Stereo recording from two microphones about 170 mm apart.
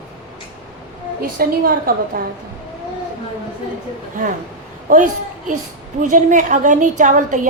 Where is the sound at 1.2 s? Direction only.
60° right (ahead or behind).